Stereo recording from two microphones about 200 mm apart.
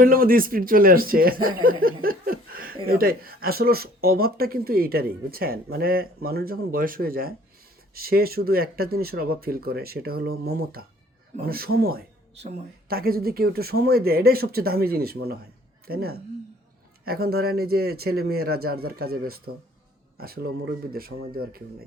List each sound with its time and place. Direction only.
0.0 s speech: 45° right (ahead or behind)
1.6 s a sound: 45° right (ahead or behind)
2.8 s speech: 45° right (ahead or behind)
12.4 s speech: 35° right (ahead or behind)
12.9 s speech: 50° right (ahead or behind)